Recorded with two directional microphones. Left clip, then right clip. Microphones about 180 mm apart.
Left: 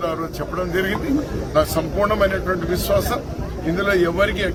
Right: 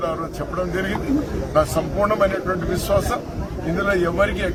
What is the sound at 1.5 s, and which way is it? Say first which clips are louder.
Speech: even; centre (ahead or behind).